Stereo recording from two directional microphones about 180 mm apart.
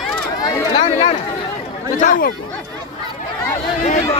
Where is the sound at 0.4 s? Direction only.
20° left (ahead or behind).